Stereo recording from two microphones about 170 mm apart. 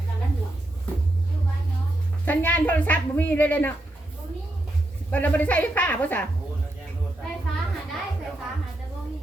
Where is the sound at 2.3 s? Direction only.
10° left (ahead or behind).